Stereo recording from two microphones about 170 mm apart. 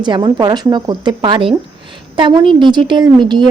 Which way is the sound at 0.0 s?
25° right (ahead or behind).